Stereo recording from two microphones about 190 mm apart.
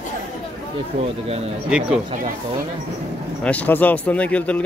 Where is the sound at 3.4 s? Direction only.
10° left (ahead or behind).